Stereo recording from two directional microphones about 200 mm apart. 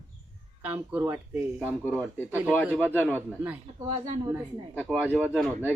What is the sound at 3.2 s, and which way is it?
Speech, 10° right (ahead or behind).